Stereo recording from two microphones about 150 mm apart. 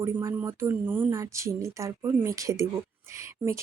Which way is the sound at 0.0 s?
15° right (ahead or behind).